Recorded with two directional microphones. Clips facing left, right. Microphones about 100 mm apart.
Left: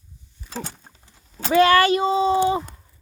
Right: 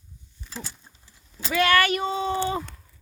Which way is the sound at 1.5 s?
30° left (ahead or behind).